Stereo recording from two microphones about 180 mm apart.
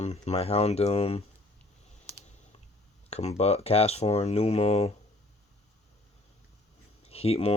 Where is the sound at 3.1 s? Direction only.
35° left (ahead or behind).